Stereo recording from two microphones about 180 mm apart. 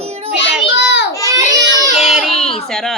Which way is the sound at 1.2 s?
20° right (ahead or behind).